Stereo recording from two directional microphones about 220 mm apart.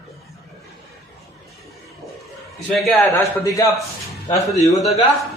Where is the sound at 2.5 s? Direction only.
Centre (ahead or behind).